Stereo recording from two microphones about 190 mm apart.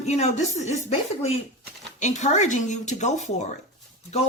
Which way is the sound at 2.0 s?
40° left (ahead or behind).